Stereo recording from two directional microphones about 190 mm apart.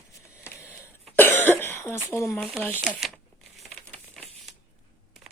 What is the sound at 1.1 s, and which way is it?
Cough, 10° left (ahead or behind).